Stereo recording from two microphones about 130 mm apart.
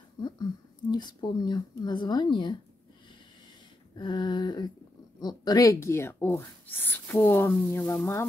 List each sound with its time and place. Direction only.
0.2 s speech: 35° left (ahead or behind)
3.9 s speech: 35° left (ahead or behind); by 8.3 s 20° left (ahead or behind)